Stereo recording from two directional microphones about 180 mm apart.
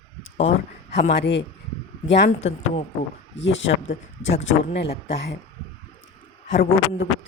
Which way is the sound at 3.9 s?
45° left (ahead or behind).